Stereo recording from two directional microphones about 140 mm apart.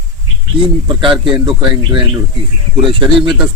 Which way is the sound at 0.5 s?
40° right (ahead or behind).